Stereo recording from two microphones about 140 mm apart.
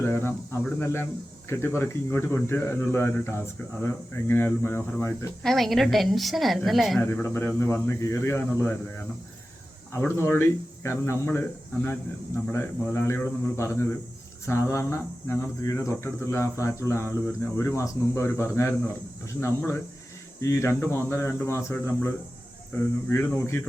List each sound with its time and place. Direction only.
0.0 s speech: 15° left (ahead or behind)
1.5 s speech: 20° left (ahead or behind)
5.4 s a woman's voice: centre (ahead or behind)
7.0 s speech: 20° left (ahead or behind)